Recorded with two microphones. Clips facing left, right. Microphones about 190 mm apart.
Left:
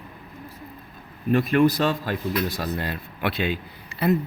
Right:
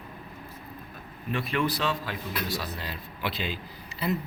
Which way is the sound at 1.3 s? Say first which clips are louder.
Left 10 dB; 45° left (ahead or behind).